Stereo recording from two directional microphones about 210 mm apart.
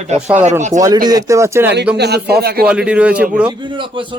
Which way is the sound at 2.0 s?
50° right (ahead or behind).